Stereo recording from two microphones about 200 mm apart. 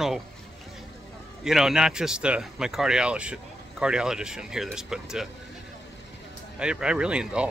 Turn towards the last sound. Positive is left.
turn(degrees=-5)  # may be behind; listen again after turning